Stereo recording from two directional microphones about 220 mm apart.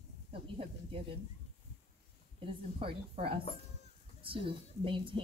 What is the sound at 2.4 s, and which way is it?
A woman's voice, 25° right (ahead or behind).